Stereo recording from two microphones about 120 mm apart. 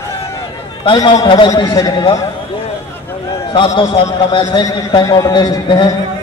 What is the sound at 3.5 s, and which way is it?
A man's voice, 45° left (ahead or behind).